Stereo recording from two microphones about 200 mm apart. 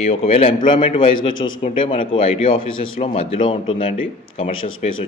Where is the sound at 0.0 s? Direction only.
30° left (ahead or behind).